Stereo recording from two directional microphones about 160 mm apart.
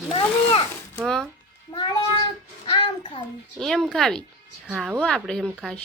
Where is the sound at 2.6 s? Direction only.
30° left (ahead or behind).